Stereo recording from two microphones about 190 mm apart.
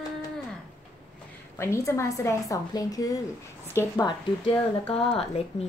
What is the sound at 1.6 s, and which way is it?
A woman's voice, 15° left (ahead or behind).